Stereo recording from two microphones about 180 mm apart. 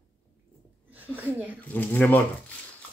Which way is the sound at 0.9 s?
10° right (ahead or behind).